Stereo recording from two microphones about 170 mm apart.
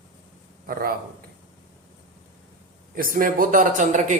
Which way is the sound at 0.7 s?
60° right (ahead or behind).